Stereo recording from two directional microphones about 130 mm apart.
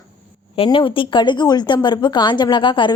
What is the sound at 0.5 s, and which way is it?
A woman's voice, 45° left (ahead or behind).